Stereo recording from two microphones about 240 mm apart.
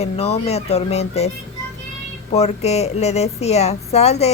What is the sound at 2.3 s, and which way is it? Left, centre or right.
Speech, left.